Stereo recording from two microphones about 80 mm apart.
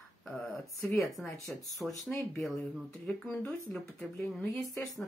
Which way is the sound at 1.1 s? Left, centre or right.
Centre.